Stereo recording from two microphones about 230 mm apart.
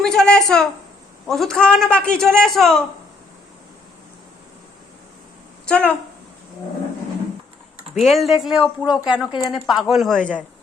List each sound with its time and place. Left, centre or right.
0.0 s a woman's voice: centre
5.6 s speech: centre
7.9 s a woman's voice: centre
9.3 s a woman's voice: centre
9.6 s a woman's voice: centre